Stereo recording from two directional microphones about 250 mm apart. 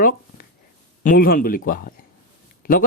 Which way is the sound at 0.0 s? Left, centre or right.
Left.